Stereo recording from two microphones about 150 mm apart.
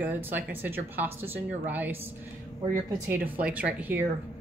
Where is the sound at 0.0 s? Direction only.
15° right (ahead or behind).